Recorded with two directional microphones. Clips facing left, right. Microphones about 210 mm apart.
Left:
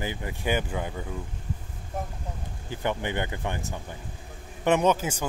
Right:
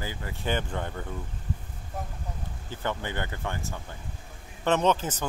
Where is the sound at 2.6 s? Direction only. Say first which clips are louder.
Left 3 dB; 15° left (ahead or behind).